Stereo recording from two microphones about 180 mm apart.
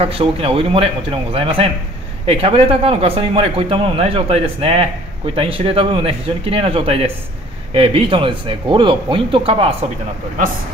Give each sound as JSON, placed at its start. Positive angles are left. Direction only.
{"t": 0.0, "sound": "speech", "side_deg": -30}